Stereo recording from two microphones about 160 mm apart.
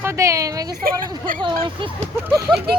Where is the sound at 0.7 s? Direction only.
65° right (ahead or behind).